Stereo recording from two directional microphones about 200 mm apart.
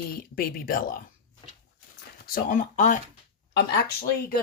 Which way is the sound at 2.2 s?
45° left (ahead or behind).